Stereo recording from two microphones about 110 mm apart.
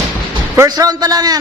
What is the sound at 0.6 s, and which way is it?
Speech, 35° right (ahead or behind).